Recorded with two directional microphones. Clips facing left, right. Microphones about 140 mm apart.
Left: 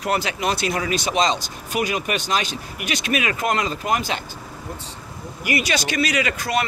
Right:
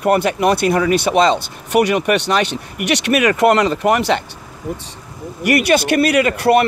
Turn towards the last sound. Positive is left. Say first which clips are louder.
# right 9 dB
turn(degrees=-60)  # may be behind; listen again after turning